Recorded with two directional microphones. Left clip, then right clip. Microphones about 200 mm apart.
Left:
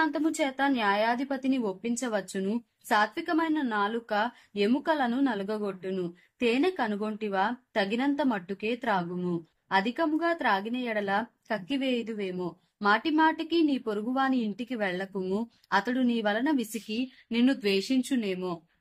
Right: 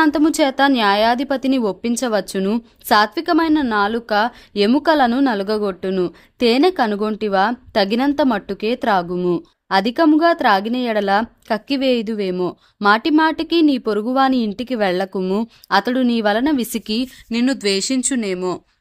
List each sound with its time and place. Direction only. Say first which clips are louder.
0.0 s a woman's voice: right 12 dB; 55° right (ahead or behind)